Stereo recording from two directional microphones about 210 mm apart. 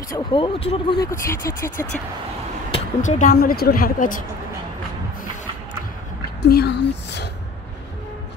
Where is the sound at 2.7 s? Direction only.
35° left (ahead or behind).